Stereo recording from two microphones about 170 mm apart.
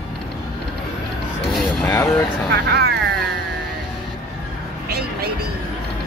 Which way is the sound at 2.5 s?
75° right (ahead or behind).